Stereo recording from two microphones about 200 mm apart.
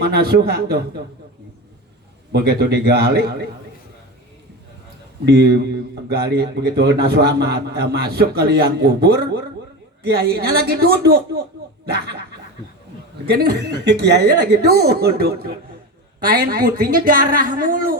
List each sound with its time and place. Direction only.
0.0 s a man's voice: 50° right (ahead or behind)
2.3 s a man's voice: 50° right (ahead or behind)
5.2 s a man's voice: 55° right (ahead or behind)
13.2 s a man's voice: 55° right (ahead or behind)